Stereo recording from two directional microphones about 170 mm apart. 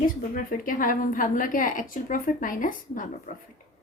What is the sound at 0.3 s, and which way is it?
A woman's voice, 50° left (ahead or behind).